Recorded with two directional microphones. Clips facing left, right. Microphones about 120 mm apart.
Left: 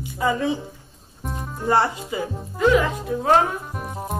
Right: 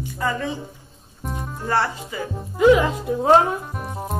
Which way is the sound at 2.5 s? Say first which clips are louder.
Right 3 dB; 15° right (ahead or behind).